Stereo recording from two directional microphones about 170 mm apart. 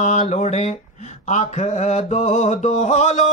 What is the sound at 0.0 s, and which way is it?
Mantra, 40° left (ahead or behind).